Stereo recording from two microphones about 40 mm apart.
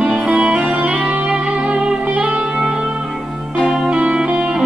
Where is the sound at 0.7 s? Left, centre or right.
Right.